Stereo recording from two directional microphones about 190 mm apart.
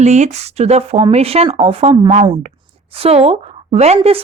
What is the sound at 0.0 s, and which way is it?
Speech, 35° right (ahead or behind).